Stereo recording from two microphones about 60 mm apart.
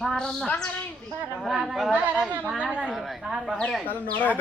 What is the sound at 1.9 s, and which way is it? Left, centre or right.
A woman's voice, right.